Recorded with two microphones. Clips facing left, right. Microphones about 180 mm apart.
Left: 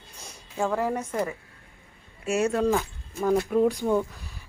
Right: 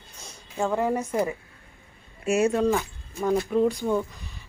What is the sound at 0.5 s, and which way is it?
A woman's voice, centre (ahead or behind).